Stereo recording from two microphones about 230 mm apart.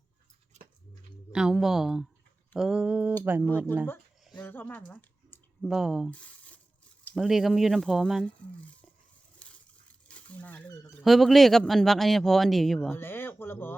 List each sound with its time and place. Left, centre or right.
0.5 s a sound: right
1.3 s speech: centre
4.3 s speech: centre
9.4 s a sound: centre
10.1 s speech: centre
11.0 s speech: centre